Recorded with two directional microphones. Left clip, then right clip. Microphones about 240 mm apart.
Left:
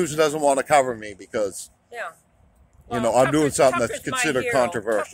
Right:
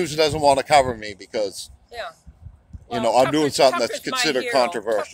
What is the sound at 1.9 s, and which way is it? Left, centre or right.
Speech, centre.